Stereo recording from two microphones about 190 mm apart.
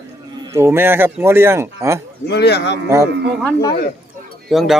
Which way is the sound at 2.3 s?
60° left (ahead or behind).